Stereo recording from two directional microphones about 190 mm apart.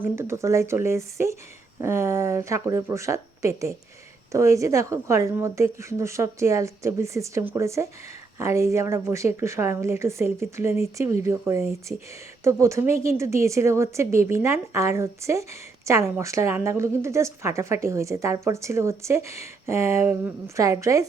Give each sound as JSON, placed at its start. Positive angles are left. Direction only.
{"t": 0.0, "sound": "speech", "side_deg": -15}